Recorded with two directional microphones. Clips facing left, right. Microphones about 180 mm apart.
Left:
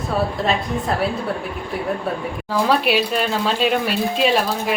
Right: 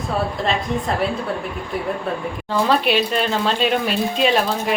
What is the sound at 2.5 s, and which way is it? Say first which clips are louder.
Speech: even; 5° left (ahead or behind).